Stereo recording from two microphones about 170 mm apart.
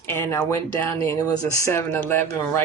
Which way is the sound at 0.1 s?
15° left (ahead or behind).